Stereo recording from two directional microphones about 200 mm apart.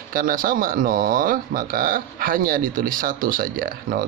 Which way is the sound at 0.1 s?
45° right (ahead or behind).